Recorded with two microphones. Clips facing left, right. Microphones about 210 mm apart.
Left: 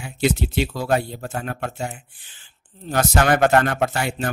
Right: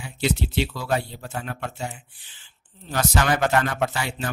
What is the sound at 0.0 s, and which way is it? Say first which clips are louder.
Speech: left 4 dB; 50° left (ahead or behind).